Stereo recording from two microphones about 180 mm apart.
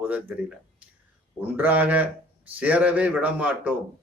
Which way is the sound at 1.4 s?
10° right (ahead or behind).